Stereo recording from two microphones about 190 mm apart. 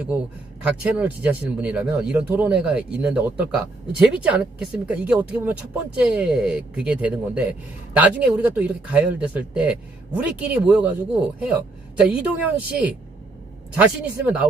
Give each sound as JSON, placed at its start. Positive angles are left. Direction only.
{"t": 0.6, "sound": "a woman's voice", "side_deg": -5}